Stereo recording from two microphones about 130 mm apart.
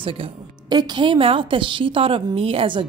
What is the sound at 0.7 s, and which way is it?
A woman's voice, 35° right (ahead or behind).